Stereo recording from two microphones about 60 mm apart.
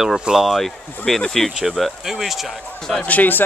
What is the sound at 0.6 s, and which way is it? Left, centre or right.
Speech, centre.